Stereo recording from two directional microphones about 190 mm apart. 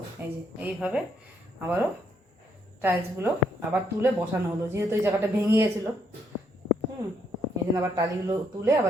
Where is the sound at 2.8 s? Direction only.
10° right (ahead or behind).